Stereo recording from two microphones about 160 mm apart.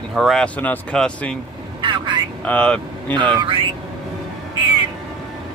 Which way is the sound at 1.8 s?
30° right (ahead or behind).